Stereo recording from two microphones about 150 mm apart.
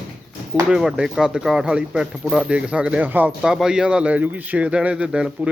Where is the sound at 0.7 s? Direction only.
5° right (ahead or behind).